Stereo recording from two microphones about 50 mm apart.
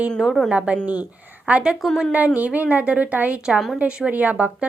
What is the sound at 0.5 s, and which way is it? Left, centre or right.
A woman's voice, right.